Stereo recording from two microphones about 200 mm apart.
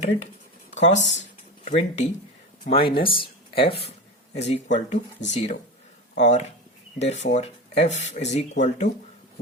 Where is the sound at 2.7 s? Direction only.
25° left (ahead or behind).